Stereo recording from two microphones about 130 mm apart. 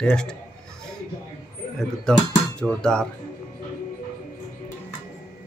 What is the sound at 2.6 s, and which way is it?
Speech, 5° left (ahead or behind).